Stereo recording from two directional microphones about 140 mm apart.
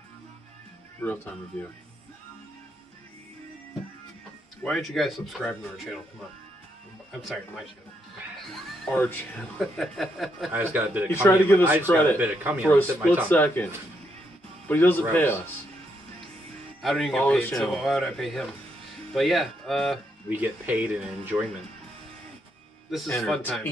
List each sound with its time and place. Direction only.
1.0 s speech: 10° left (ahead or behind)
4.6 s speech: centre (ahead or behind)
7.1 s speech: centre (ahead or behind)
8.6 s speech: 5° left (ahead or behind)
10.5 s speech: 15° right (ahead or behind)
11.2 s speech: 15° left (ahead or behind)
12.2 s speech: 10° right (ahead or behind)
13.3 s speech: 15° left (ahead or behind)
14.7 s speech: 15° left (ahead or behind)
16.8 s speech: centre (ahead or behind)
17.6 s speech: centre (ahead or behind)
20.2 s speech: 10° right (ahead or behind)
22.8 s speech: centre (ahead or behind)